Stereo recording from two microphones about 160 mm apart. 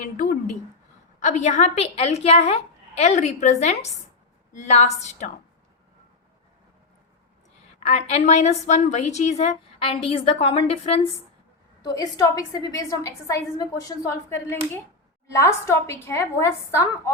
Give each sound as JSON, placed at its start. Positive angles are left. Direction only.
{"t": 0.0, "sound": "a woman's voice", "side_deg": 55}
{"t": 7.8, "sound": "a woman's voice", "side_deg": 45}
{"t": 11.9, "sound": "a woman's voice", "side_deg": 25}